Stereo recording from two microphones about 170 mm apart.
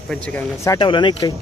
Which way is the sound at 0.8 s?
30° left (ahead or behind).